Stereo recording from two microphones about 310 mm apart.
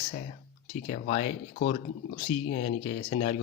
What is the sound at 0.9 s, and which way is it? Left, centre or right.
Speech, left.